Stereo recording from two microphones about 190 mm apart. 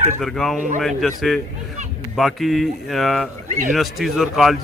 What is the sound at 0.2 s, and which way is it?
Speech, centre (ahead or behind).